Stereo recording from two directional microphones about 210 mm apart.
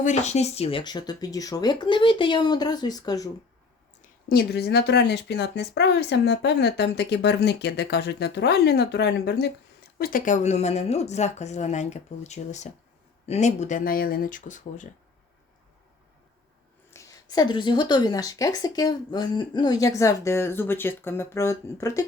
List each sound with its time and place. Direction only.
0.0 s speech: 35° left (ahead or behind); by 3.2 s 20° left (ahead or behind)
4.3 s speech: 50° left (ahead or behind)
10.0 s speech: 40° left (ahead or behind)
16.9 s a woman's voice: 15° left (ahead or behind)